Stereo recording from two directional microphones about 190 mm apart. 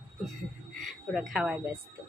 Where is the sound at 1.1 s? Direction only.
Centre (ahead or behind).